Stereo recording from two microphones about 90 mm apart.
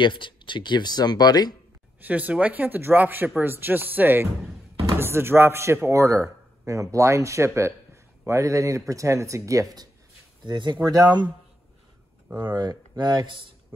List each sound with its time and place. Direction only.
0.0 s speech: 65° left (ahead or behind); by 1.5 s 50° left (ahead or behind)
2.0 s a man's voice: 15° right (ahead or behind); by 9.8 s 40° right (ahead or behind)
10.4 s speech: 55° right (ahead or behind)
12.5 s speech: 55° right (ahead or behind)